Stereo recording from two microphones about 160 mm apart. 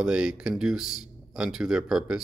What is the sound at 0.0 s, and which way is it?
Speech, 5° right (ahead or behind).